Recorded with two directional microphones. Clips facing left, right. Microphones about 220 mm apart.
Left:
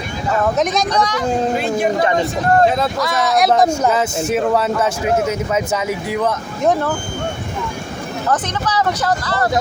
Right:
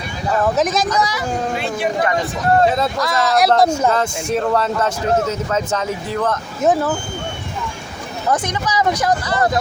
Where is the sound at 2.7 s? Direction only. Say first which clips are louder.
Even; centre (ahead or behind).